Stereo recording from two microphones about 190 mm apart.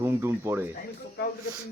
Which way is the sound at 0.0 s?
15° right (ahead or behind).